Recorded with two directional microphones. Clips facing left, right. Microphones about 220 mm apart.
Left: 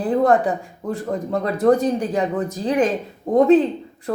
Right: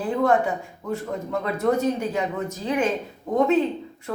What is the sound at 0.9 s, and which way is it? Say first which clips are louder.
Speech: left 4 dB; 35° left (ahead or behind).